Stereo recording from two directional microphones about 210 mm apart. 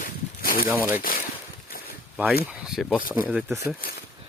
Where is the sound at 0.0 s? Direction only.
45° left (ahead or behind).